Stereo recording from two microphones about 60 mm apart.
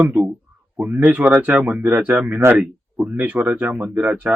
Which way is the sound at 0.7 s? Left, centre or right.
Right.